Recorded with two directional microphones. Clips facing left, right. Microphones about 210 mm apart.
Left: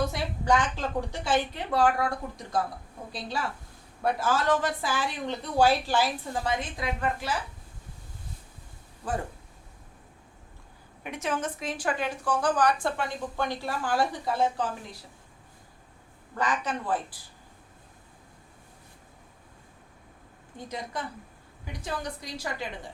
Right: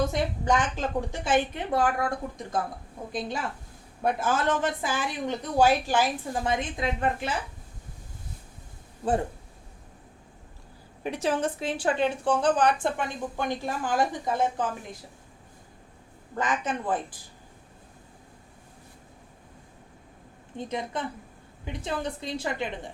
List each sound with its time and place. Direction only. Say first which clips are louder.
0.1 s a woman's voice: right 1 dB; 20° right (ahead or behind)
11.0 s a woman's voice: right 4 dB; 35° right (ahead or behind)
16.4 s a woman's voice: right 1 dB; 20° right (ahead or behind)
20.6 s a woman's voice: right 4 dB; 25° right (ahead or behind)